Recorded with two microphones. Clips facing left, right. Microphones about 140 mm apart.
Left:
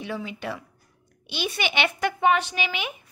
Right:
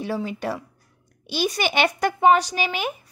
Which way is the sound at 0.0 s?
40° right (ahead or behind).